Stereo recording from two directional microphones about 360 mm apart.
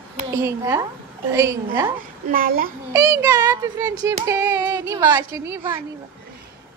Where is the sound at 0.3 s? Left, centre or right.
Centre.